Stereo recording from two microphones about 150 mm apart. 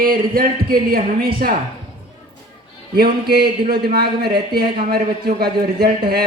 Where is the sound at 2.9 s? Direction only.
90° right.